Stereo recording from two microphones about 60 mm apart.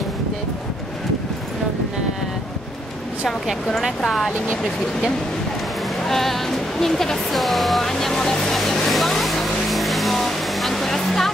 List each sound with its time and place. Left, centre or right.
4.0 s speech: centre
6.0 s music: centre